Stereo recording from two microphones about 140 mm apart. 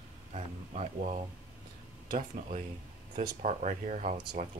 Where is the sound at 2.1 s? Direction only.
70° right (ahead or behind).